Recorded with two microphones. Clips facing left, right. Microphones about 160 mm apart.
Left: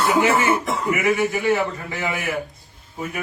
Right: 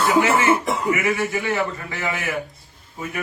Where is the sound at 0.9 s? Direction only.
20° left (ahead or behind).